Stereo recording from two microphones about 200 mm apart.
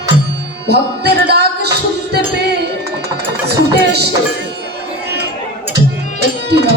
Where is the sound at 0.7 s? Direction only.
55° right (ahead or behind).